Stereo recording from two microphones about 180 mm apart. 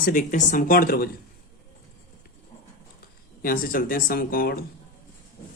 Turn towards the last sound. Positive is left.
turn(degrees=55)  # may be behind; listen again after turning